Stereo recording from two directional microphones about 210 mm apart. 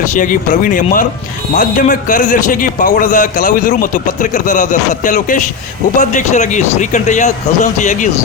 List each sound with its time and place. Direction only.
0.1 s a man's voice: 40° left (ahead or behind)